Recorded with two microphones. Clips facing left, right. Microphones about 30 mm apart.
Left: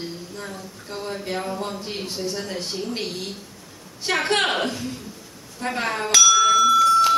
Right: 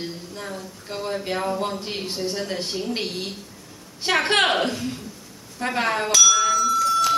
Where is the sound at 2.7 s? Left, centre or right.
Centre.